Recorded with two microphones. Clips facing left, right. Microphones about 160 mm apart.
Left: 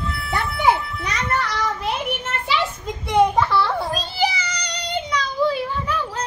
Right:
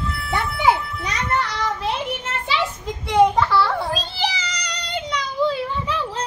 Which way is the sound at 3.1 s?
15° left (ahead or behind).